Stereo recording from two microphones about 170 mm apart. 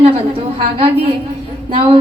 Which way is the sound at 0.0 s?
35° right (ahead or behind).